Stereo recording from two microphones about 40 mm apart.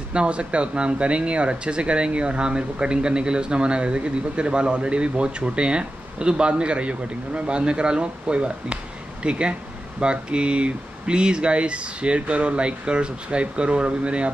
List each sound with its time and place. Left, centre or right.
0.1 s speech: right